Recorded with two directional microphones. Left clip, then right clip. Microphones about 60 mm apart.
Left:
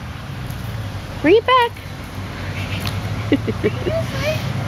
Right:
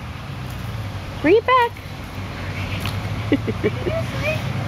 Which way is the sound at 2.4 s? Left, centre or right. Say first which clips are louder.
Left 2 dB; centre.